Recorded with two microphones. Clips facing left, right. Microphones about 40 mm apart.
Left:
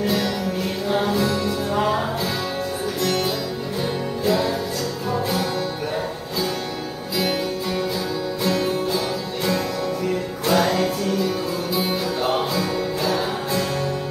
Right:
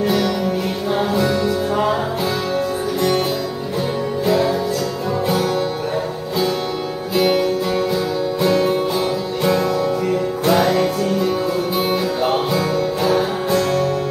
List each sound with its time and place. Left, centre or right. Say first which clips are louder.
0.8 s music: right 2 dB; centre
7.2 s music: right 7 dB; centre
8.5 s music: right 5 dB; centre
8.7 s music: right 4 dB; right
10.4 s music: right 3 dB; centre